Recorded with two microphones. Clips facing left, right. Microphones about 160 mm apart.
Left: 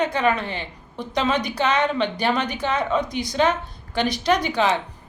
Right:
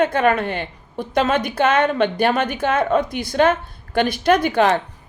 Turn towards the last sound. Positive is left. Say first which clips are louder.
# right 4 dB
turn(degrees=-50)  # may be behind; listen again after turning